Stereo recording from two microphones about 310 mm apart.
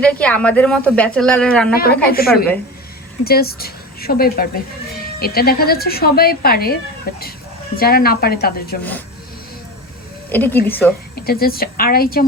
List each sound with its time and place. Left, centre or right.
0.2 s speech: centre
1.7 s a woman's voice: left
8.8 s speech: centre
10.3 s a woman's voice: centre
11.1 s a woman's voice: left